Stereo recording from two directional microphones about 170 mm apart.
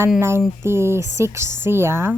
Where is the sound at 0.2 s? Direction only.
15° right (ahead or behind).